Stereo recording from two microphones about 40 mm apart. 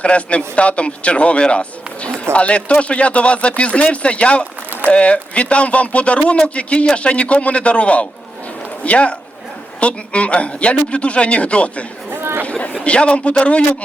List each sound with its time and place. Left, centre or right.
0.0 s a man's voice: left
12.1 s chatter: right
12.5 s a man's voice: left